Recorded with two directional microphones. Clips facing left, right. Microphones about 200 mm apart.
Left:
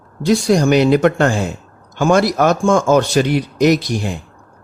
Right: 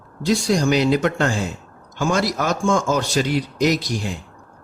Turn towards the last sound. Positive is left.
turn(degrees=60)  # may be behind; listen again after turning